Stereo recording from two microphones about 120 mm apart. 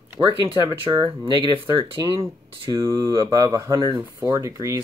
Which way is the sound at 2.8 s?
30° right (ahead or behind).